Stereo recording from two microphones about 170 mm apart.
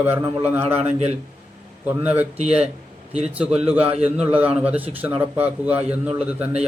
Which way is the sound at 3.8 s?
35° right (ahead or behind).